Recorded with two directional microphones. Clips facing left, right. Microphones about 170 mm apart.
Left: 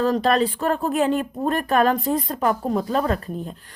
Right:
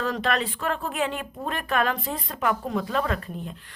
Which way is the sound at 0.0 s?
35° left (ahead or behind).